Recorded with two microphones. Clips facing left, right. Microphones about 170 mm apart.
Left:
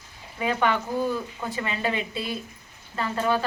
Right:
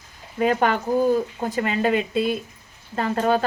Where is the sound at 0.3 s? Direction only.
45° right (ahead or behind).